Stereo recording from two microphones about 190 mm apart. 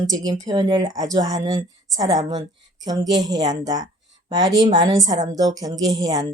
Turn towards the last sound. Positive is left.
turn(degrees=-20)  # may be behind; listen again after turning